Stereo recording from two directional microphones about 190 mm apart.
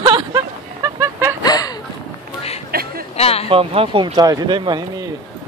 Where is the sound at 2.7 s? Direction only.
55° right (ahead or behind).